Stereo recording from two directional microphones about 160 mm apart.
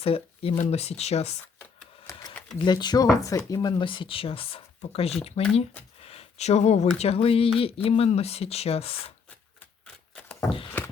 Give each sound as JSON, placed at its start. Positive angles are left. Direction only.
{"t": 0.0, "sound": "speech", "side_deg": 40}
{"t": 2.6, "sound": "speech", "side_deg": 25}